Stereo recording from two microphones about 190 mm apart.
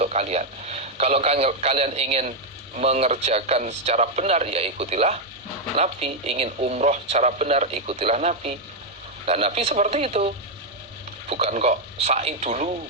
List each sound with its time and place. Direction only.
0.0 s a man's voice: 35° right (ahead or behind)